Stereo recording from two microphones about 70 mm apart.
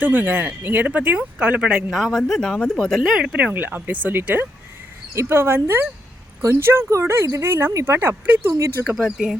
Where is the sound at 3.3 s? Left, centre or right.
Right.